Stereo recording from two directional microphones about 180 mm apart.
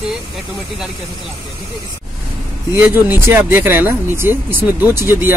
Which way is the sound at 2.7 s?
10° right (ahead or behind).